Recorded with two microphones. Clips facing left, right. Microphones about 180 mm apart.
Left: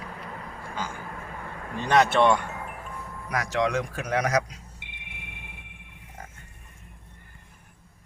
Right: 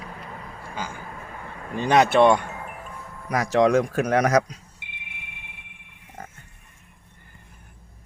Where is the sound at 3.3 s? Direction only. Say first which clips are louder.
Right 7 dB; 30° right (ahead or behind); by 4.4 s 50° right (ahead or behind).